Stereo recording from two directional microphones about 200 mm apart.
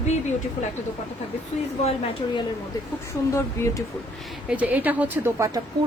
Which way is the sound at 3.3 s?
15° left (ahead or behind).